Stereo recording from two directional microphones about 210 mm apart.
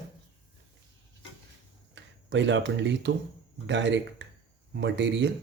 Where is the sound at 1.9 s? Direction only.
60° right (ahead or behind).